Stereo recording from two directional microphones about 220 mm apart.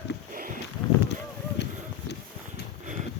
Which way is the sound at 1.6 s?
50° left (ahead or behind).